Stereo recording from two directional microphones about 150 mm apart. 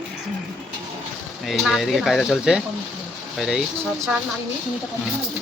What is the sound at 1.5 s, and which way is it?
Speech, centre (ahead or behind).